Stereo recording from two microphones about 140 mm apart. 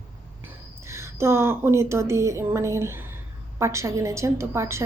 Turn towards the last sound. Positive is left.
turn(degrees=-20)  # may be behind; listen again after turning